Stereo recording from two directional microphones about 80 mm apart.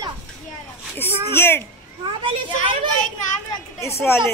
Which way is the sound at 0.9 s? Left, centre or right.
Left.